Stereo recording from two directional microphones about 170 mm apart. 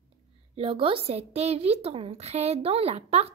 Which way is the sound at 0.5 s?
35° right (ahead or behind).